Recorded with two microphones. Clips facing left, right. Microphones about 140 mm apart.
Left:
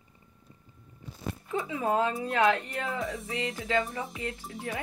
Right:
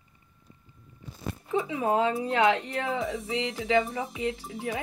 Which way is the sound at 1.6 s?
15° right (ahead or behind).